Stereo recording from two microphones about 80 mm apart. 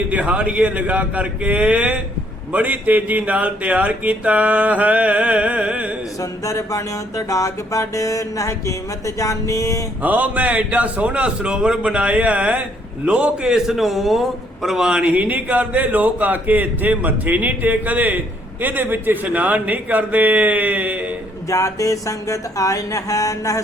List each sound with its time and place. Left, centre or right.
0.1 s a man's voice: centre
6.4 s mantra: left
10.0 s a man's voice: right
21.5 s mantra: left